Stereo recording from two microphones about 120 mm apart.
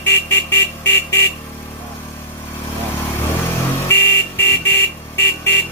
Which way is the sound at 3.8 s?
20° left (ahead or behind).